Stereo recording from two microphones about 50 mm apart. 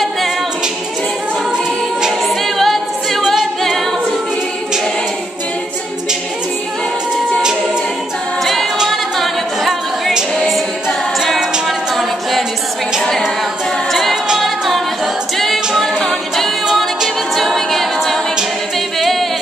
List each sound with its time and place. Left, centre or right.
2.2 s a capella: centre
9.2 s a capella: centre
11.1 s music: centre
15.3 s a capella: centre
18.9 s music: centre